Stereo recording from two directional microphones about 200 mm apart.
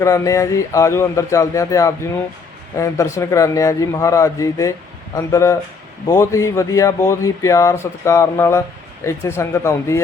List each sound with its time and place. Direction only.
0.0 s speech: 15° left (ahead or behind)